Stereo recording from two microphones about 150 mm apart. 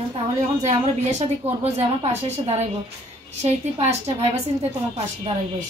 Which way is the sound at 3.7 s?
40° right (ahead or behind).